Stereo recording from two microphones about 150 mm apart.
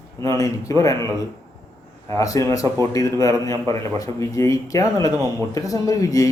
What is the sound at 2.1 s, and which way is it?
A man's voice, 20° left (ahead or behind).